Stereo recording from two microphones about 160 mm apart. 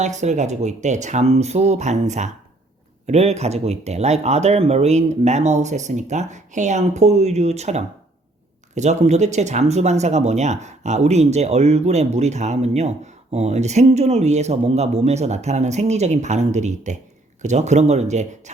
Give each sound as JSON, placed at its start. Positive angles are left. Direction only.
{"t": 0.0, "sound": "speech", "side_deg": -50}